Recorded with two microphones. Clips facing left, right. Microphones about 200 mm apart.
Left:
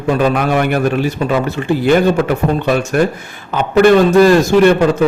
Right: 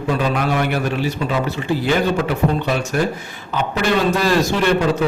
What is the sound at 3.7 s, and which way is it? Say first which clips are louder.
Mantra: left 11 dB; 55° left (ahead or behind).